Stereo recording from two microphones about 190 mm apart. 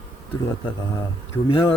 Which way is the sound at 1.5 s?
25° left (ahead or behind).